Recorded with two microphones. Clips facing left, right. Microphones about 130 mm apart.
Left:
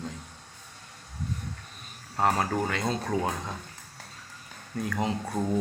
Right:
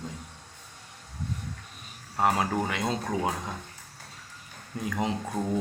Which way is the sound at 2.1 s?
10° right (ahead or behind).